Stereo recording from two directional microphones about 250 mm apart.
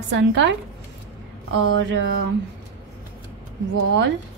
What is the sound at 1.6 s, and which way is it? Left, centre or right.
Speech, right.